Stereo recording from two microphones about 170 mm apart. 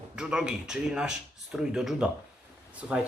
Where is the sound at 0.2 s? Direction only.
5° right (ahead or behind).